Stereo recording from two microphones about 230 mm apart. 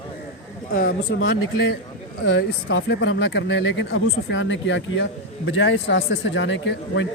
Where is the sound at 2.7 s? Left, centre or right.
Left.